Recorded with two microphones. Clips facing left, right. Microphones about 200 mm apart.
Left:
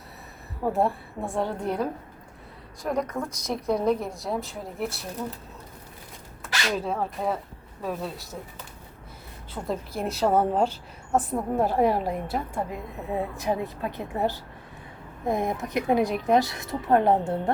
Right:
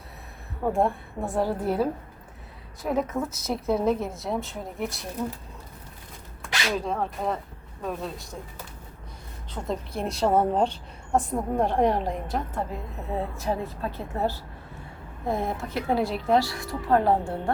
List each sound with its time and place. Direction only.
0.6 s a woman's voice: centre (ahead or behind)
6.4 s speech: centre (ahead or behind)
9.5 s a woman's voice: 5° left (ahead or behind); by 17.5 s 20° left (ahead or behind)